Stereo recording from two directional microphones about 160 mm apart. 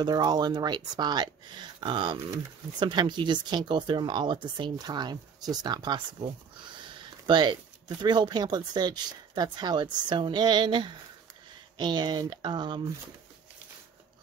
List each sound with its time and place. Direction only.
0.0 s speech: 25° right (ahead or behind)
7.2 s speech: 30° right (ahead or behind)